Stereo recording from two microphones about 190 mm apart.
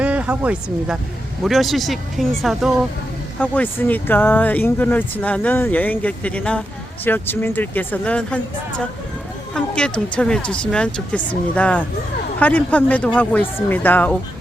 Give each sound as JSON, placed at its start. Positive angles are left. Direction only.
{"t": 0.0, "sound": "speech", "side_deg": -5}
{"t": 9.6, "sound": "speech", "side_deg": 5}